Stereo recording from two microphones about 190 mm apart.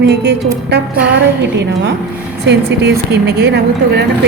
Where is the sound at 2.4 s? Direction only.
60° right (ahead or behind).